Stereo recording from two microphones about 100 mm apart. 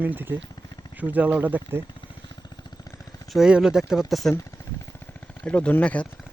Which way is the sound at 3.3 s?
5° right (ahead or behind).